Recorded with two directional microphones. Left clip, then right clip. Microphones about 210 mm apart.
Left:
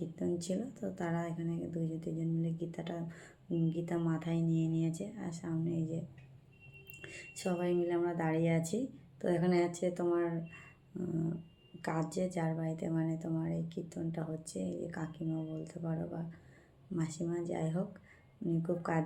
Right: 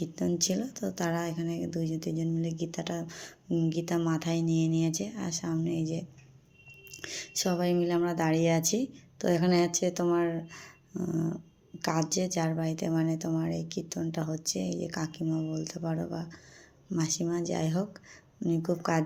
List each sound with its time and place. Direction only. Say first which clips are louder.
0.0 s speech: right 7 dB; 45° right (ahead or behind)